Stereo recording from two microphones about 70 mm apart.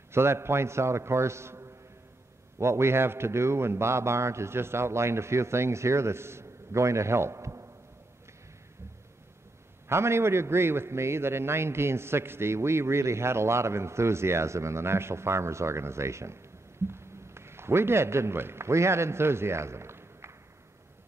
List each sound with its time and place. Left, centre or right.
0.1 s a man's voice: right
9.8 s a man's voice: right